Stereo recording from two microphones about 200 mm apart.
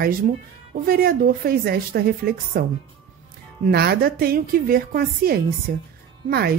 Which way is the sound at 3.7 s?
50° right (ahead or behind).